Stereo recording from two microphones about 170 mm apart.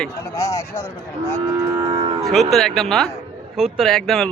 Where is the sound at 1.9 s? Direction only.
30° right (ahead or behind).